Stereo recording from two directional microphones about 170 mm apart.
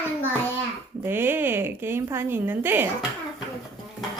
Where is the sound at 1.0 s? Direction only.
15° right (ahead or behind).